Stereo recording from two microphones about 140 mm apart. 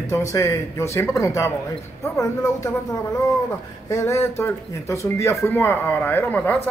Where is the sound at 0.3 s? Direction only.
20° left (ahead or behind).